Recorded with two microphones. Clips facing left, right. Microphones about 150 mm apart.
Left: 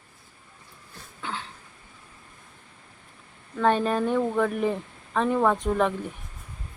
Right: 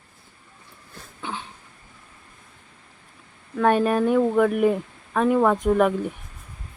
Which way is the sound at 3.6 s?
10° right (ahead or behind).